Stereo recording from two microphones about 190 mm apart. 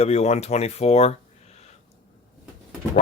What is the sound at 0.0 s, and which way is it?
Speech, 35° left (ahead or behind).